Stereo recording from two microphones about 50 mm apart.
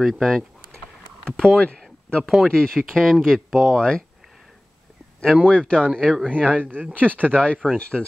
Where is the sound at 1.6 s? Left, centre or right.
Left.